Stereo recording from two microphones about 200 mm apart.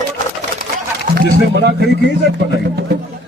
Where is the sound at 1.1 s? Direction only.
45° right (ahead or behind).